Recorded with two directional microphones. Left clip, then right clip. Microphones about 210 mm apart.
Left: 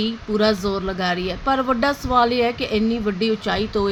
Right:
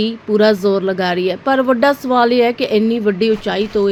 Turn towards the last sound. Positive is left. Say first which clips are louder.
# right 5 dB
turn(degrees=0)  # may be behind; listen again after turning